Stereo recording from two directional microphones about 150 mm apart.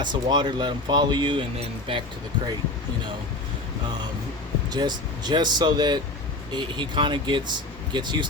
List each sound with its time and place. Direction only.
0.0 s speech: 30° right (ahead or behind)
4.7 s speech: 30° right (ahead or behind)